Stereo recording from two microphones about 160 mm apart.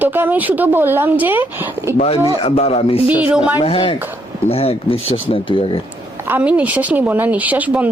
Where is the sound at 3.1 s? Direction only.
10° right (ahead or behind).